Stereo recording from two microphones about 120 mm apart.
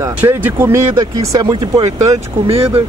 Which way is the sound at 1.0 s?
35° right (ahead or behind).